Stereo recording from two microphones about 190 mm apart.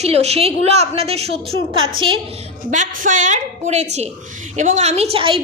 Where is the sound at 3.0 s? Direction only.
40° right (ahead or behind).